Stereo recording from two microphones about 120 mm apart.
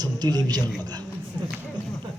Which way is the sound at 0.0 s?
35° right (ahead or behind).